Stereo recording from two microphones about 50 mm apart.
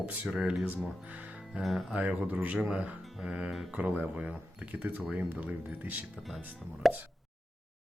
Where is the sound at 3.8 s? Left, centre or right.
Right.